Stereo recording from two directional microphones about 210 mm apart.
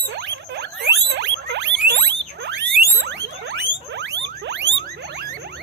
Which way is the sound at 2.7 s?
50° right (ahead or behind).